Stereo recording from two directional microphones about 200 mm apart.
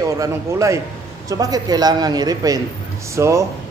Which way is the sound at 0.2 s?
15° right (ahead or behind).